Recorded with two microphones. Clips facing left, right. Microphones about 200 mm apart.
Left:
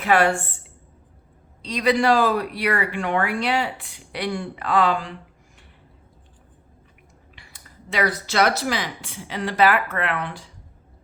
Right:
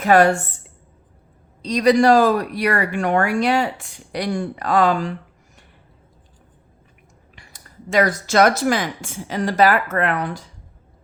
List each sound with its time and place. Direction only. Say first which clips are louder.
0.0 s a woman's voice: right 5 dB; 40° right (ahead or behind)
1.6 s speech: right 5 dB; 40° right (ahead or behind)
7.3 s speech: right 6 dB; 45° right (ahead or behind)